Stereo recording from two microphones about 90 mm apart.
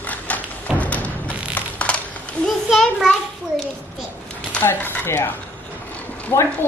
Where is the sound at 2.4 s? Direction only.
Centre (ahead or behind).